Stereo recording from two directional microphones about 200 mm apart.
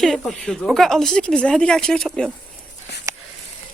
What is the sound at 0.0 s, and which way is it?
Speech, centre (ahead or behind).